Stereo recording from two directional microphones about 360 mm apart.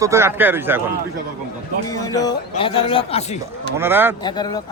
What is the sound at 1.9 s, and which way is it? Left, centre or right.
A man's voice, centre.